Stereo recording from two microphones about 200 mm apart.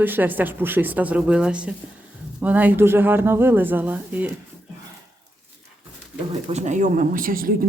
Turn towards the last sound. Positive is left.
turn(degrees=-45)  # may be behind; listen again after turning